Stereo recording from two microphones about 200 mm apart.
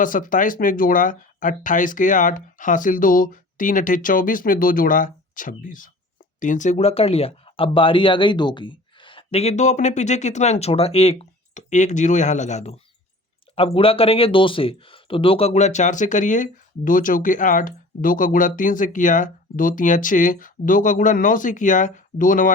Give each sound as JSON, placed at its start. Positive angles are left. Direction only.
{"t": 0.0, "sound": "speech", "side_deg": 40}